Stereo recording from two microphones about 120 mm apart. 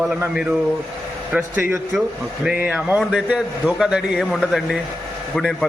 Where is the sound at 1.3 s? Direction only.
20° right (ahead or behind).